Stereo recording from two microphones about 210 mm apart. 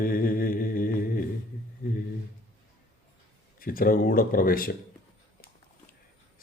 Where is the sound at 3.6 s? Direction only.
45° left (ahead or behind).